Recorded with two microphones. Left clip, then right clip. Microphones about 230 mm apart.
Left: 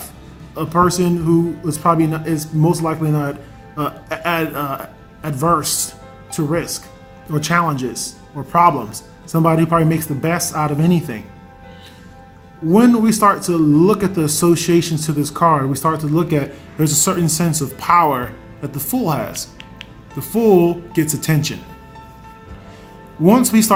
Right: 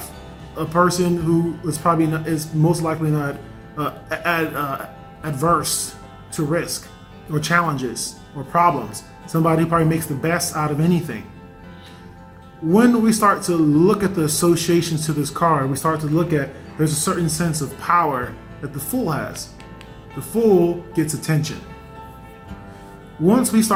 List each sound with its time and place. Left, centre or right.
0.5 s speech: left
12.7 s speech: left
19.0 s speech: left
23.2 s speech: left